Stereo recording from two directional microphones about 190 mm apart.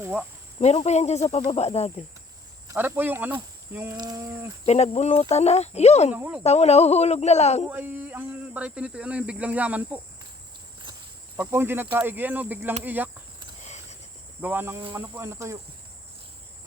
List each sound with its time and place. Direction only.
0.0 s speech: 5° right (ahead or behind)
0.6 s speech: 35° left (ahead or behind)
2.6 s speech: 10° right (ahead or behind)
3.7 s a sound: 10° right (ahead or behind)
3.9 s speech: 20° right (ahead or behind)
4.6 s speech: 35° left (ahead or behind)
6.1 s speech: 10° right (ahead or behind)
6.4 s speech: 35° left (ahead or behind)
7.6 s speech: 10° right (ahead or behind)
11.3 s speech: 10° right (ahead or behind)
14.4 s speech: 10° right (ahead or behind)